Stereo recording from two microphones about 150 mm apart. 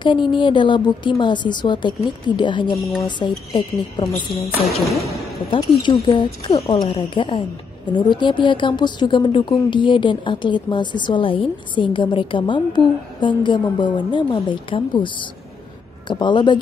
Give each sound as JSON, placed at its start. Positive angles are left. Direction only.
{"t": 0.0, "sound": "a woman's voice", "side_deg": 30}
{"t": 5.5, "sound": "a woman's voice", "side_deg": 30}